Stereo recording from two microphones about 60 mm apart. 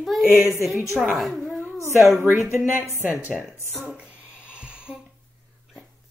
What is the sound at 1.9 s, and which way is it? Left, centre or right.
Speech, right.